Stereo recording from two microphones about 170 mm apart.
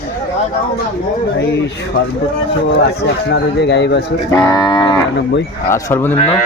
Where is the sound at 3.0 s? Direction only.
80° left.